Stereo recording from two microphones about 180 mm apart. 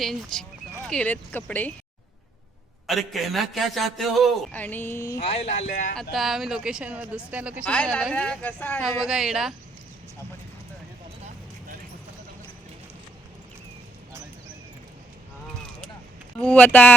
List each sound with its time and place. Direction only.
0.0 s a man's voice: centre (ahead or behind)
2.8 s a man's voice: centre (ahead or behind)
4.6 s speech: 10° left (ahead or behind)
5.2 s speech: 35° left (ahead or behind)
6.1 s a man's voice: centre (ahead or behind)
7.6 s speech: 5° left (ahead or behind)
8.8 s a man's voice: 5° right (ahead or behind)
16.4 s speech: 5° left (ahead or behind)